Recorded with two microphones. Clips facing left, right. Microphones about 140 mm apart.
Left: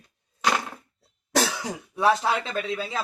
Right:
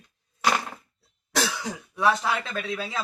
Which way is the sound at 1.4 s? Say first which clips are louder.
Left 2 dB; 35° left (ahead or behind).